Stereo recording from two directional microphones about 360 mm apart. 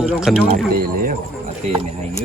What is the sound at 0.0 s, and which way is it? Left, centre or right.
Speech, centre.